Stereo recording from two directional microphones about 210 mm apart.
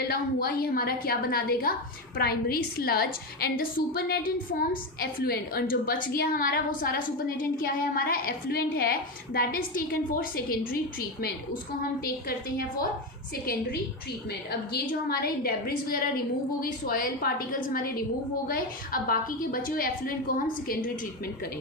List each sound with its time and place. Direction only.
0.0 s a woman's voice: 45° left (ahead or behind)
13.4 s a woman's voice: 45° left (ahead or behind)